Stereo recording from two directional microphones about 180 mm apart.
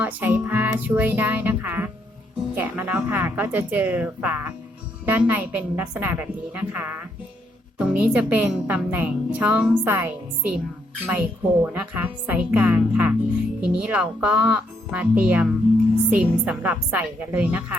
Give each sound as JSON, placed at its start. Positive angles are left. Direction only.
{"t": 0.0, "sound": "a woman's voice", "side_deg": -10}